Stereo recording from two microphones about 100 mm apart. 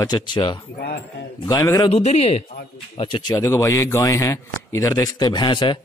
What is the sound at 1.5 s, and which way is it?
Speech, 40° left (ahead or behind).